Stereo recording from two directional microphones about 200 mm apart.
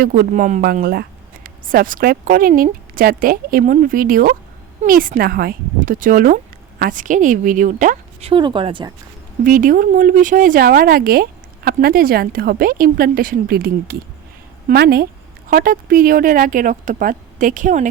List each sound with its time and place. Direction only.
0.0 s speech: 45° right (ahead or behind)
8.3 s speech: 25° right (ahead or behind)
9.4 s speech: 45° right (ahead or behind)